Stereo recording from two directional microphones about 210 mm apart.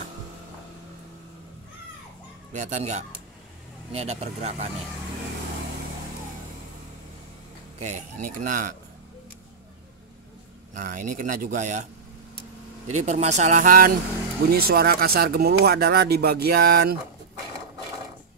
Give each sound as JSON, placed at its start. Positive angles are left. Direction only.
{"t": 2.5, "sound": "speech", "side_deg": -35}
{"t": 7.8, "sound": "speech", "side_deg": -35}
{"t": 10.7, "sound": "speech", "side_deg": -40}